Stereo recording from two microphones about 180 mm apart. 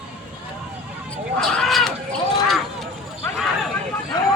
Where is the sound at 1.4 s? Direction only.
Centre (ahead or behind).